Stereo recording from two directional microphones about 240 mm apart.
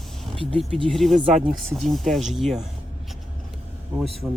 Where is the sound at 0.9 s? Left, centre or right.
Centre.